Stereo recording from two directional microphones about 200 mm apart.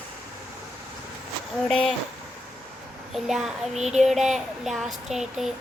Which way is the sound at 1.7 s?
5° left (ahead or behind).